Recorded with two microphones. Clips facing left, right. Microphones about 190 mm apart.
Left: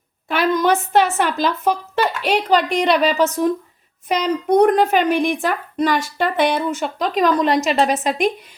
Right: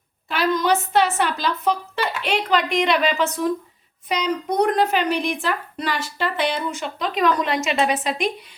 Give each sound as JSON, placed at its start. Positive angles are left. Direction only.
{"t": 0.3, "sound": "speech", "side_deg": 55}
{"t": 4.1, "sound": "speech", "side_deg": 50}